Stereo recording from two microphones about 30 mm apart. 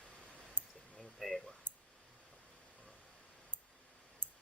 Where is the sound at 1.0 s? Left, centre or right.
Centre.